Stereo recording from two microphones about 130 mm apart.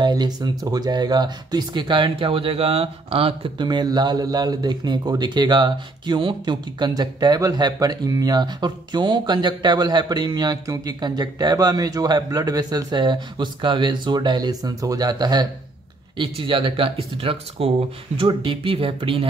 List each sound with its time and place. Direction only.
0.0 s speech: 35° right (ahead or behind)